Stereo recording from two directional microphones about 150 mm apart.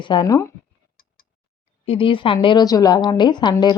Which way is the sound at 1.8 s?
35° left (ahead or behind).